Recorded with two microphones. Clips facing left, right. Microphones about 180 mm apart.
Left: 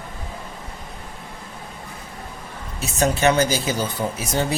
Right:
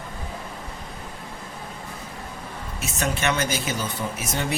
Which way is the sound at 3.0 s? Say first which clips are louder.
Left 7 dB; 35° left (ahead or behind).